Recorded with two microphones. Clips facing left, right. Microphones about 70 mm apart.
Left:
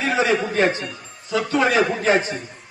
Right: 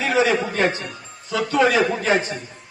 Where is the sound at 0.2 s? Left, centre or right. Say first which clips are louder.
Right 1 dB; left.